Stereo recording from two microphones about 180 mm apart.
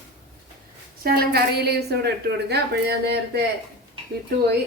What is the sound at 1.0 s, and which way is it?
A woman's voice, 55° right (ahead or behind).